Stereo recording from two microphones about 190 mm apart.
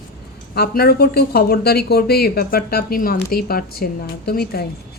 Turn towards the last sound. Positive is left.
turn(degrees=55)  # may be behind; listen again after turning